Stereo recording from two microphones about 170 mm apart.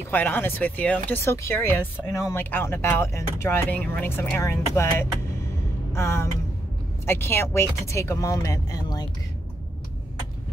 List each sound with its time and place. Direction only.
0.1 s speech: 10° left (ahead or behind)